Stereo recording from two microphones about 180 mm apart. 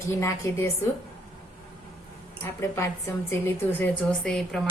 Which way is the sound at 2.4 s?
15° left (ahead or behind).